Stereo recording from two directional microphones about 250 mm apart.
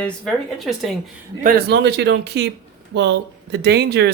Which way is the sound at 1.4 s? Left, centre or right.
Right.